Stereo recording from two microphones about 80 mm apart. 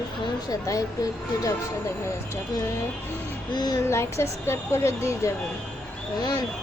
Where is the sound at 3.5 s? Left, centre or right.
Left.